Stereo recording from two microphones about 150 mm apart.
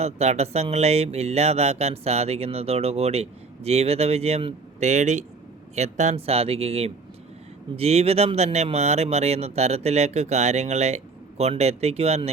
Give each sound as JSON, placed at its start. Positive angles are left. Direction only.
{"t": 0.0, "sound": "speech", "side_deg": -45}